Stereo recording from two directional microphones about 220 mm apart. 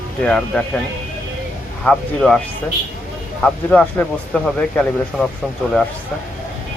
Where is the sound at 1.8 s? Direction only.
5° left (ahead or behind).